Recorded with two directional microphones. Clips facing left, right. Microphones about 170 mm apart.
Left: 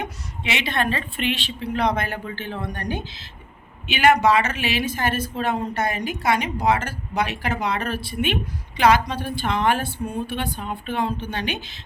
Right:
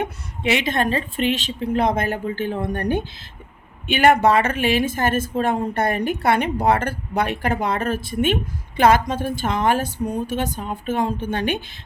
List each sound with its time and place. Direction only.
0.0 s a woman's voice: 45° right (ahead or behind)